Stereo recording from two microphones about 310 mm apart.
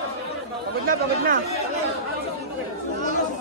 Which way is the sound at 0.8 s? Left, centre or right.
Right.